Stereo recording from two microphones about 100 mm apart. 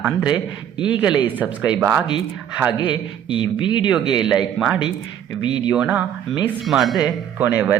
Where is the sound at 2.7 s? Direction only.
50° left (ahead or behind).